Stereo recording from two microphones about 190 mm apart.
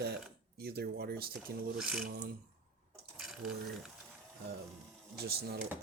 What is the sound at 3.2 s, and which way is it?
Mechanisms, centre (ahead or behind).